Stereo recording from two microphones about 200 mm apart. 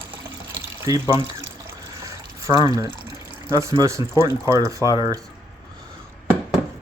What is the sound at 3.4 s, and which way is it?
Speech, 15° right (ahead or behind).